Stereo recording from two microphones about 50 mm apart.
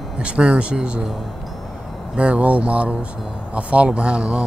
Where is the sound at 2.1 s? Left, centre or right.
Right.